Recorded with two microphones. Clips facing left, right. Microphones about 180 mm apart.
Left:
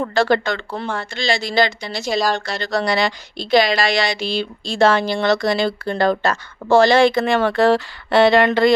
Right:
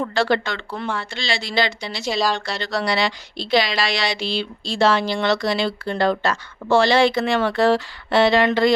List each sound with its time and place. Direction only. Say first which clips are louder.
0.1 s speech: left 3 dB; 45° left (ahead or behind)